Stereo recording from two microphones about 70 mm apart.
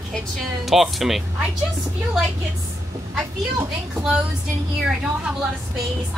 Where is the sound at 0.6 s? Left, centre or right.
Centre.